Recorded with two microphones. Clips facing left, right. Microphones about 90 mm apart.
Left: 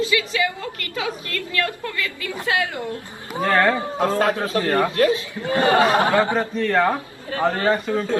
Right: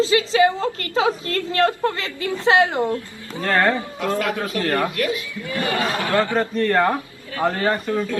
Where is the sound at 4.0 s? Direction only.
35° left (ahead or behind).